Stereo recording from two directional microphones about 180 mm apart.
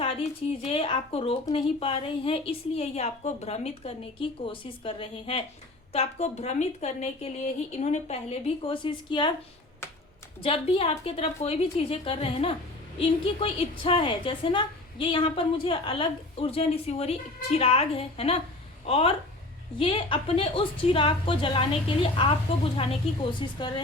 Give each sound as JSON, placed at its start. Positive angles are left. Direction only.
{"t": 0.0, "sound": "a woman's voice", "side_deg": 35}
{"t": 10.4, "sound": "a woman's voice", "side_deg": 30}
{"t": 23.6, "sound": "a woman's voice", "side_deg": 25}